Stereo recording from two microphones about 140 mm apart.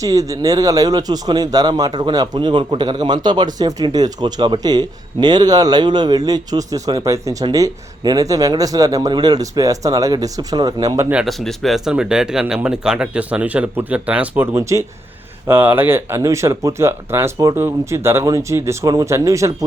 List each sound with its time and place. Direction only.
0.0 s speech: 25° right (ahead or behind)
11.1 s speech: 5° right (ahead or behind); by 19.6 s 20° right (ahead or behind)